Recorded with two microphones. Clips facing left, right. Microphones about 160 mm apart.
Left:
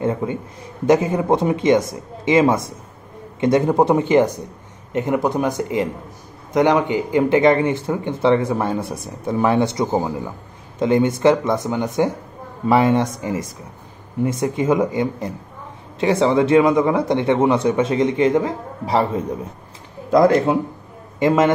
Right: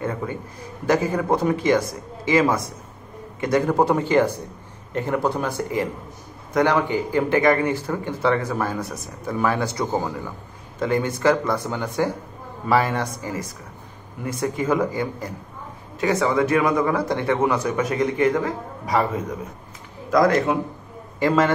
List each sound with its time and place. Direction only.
0.0 s a man's voice: 25° left (ahead or behind)